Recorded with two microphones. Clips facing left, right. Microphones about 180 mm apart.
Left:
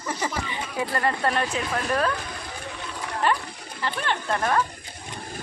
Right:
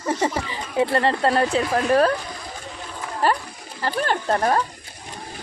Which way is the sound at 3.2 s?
40° right (ahead or behind).